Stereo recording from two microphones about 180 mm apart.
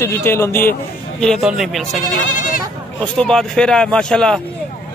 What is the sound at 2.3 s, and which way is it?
Speech, 50° left (ahead or behind).